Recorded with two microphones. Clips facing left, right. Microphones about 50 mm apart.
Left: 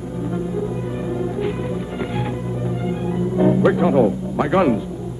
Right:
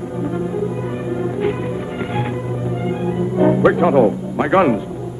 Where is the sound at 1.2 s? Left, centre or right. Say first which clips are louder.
Right 5 dB; right.